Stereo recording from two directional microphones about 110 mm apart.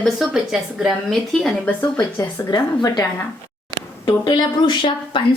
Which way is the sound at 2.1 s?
40° left (ahead or behind).